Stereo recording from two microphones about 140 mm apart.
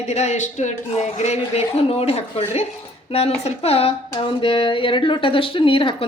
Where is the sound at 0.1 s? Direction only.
55° left (ahead or behind).